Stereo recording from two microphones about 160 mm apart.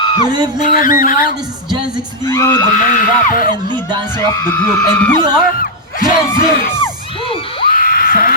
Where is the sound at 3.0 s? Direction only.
65° left (ahead or behind).